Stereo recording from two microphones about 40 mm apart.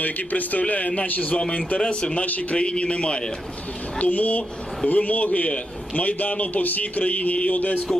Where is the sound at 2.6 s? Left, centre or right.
Left.